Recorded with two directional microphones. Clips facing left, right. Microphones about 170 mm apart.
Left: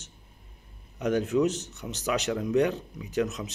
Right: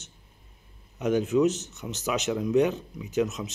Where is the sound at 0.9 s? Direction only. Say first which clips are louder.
Right 1 dB; 5° right (ahead or behind).